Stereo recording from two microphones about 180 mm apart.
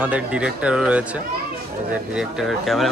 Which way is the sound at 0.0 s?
5° right (ahead or behind).